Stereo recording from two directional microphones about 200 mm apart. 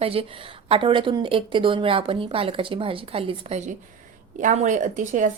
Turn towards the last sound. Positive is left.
turn(degrees=-40)  # may be behind; listen again after turning